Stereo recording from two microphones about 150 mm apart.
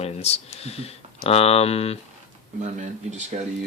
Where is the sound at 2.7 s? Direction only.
55° right (ahead or behind).